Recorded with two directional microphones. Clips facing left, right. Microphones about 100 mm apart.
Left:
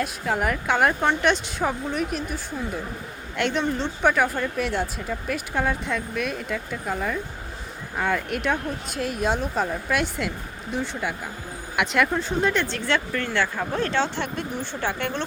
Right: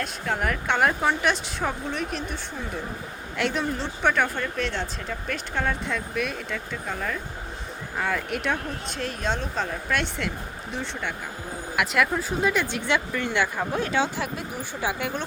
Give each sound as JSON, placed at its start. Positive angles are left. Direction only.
{"t": 0.0, "sound": "speech", "side_deg": 5}